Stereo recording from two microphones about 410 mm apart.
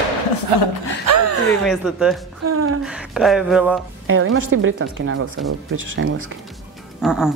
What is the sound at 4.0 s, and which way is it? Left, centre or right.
A woman's voice, right.